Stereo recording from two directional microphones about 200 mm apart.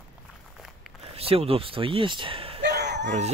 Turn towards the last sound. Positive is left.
turn(degrees=-60)  # may be behind; listen again after turning